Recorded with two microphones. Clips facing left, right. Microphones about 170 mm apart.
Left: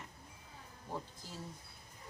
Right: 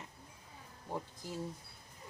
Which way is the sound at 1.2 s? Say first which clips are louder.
Right 7 dB; 15° right (ahead or behind).